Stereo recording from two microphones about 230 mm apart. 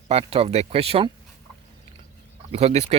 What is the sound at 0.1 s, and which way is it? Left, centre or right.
Speech, right.